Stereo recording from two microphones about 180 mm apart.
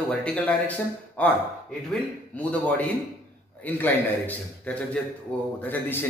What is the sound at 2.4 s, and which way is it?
A man's voice, 10° left (ahead or behind).